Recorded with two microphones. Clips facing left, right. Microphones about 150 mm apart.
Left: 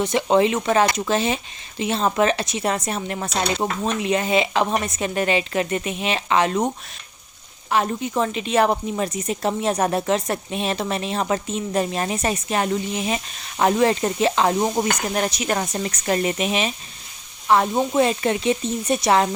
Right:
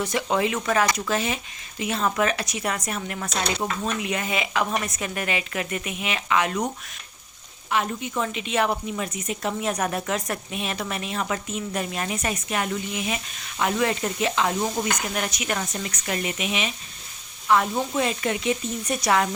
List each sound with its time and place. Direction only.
0.0 s speech: 25° left (ahead or behind)
7.7 s speech: 35° left (ahead or behind)